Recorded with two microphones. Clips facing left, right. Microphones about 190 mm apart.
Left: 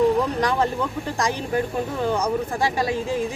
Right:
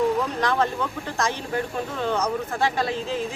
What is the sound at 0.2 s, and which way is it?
Speech, 10° left (ahead or behind).